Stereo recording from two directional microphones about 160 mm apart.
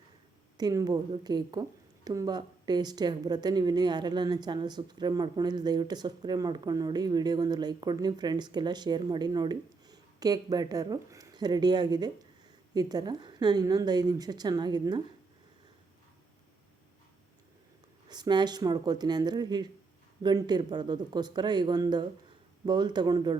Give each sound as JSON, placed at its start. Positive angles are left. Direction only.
{"t": 0.5, "sound": "a woman's voice", "side_deg": -25}
{"t": 18.1, "sound": "a woman's voice", "side_deg": -25}